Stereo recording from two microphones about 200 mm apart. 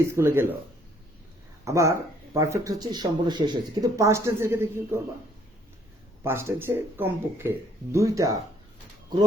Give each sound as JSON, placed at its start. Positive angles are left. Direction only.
{"t": 0.0, "sound": "speech", "side_deg": -10}
{"t": 1.6, "sound": "speech", "side_deg": -15}
{"t": 6.2, "sound": "speech", "side_deg": -10}